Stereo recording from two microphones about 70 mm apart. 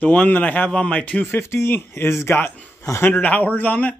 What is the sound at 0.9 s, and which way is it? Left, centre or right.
Speech, left.